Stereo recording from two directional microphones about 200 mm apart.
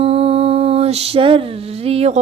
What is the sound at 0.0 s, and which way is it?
Mantra, 30° right (ahead or behind).